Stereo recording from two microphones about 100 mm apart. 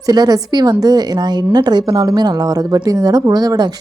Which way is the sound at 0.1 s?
40° right (ahead or behind).